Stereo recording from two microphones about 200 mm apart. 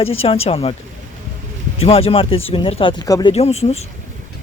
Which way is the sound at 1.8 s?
30° left (ahead or behind).